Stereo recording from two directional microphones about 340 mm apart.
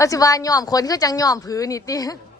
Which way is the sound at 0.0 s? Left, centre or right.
Centre.